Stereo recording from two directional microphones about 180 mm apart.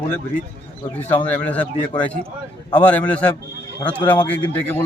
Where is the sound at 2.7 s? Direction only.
10° left (ahead or behind).